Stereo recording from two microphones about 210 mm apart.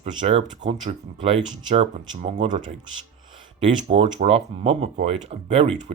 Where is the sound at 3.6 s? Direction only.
25° right (ahead or behind).